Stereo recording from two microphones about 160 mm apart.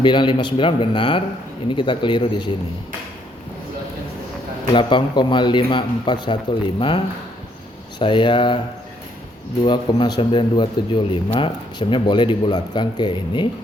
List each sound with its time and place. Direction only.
0.0 s a man's voice: 30° left (ahead or behind)
4.7 s a man's voice: 30° left (ahead or behind)
9.6 s speech: 30° left (ahead or behind)